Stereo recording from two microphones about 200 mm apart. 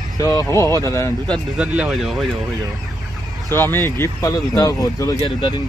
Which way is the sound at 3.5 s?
10° left (ahead or behind).